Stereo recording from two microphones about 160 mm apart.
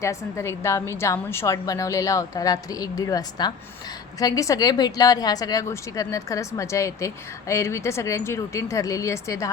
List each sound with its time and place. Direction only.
0.0 s a woman's voice: 20° left (ahead or behind)